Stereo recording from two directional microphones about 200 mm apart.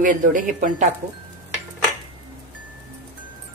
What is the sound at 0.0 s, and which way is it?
Speech, 40° right (ahead or behind).